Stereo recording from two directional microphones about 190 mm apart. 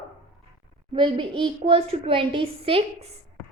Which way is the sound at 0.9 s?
25° right (ahead or behind).